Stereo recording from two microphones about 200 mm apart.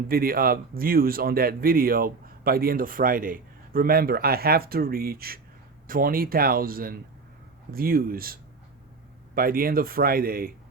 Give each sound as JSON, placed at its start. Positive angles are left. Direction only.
{"t": 0.1, "sound": "speech", "side_deg": -45}